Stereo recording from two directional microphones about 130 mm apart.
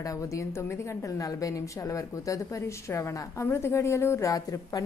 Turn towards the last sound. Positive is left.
turn(degrees=30)  # may be behind; listen again after turning